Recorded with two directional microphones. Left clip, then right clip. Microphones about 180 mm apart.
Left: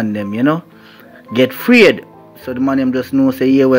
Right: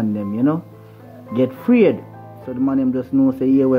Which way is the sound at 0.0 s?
10° left (ahead or behind).